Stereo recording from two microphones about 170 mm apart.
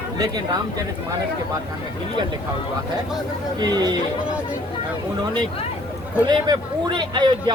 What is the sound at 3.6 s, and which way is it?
Speech, 25° right (ahead or behind).